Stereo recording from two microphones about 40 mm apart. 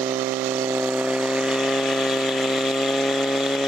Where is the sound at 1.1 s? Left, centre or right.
Centre.